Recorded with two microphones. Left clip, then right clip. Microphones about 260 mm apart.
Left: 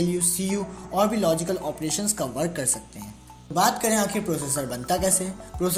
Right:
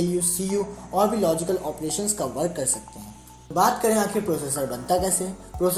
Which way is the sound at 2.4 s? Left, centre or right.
Left.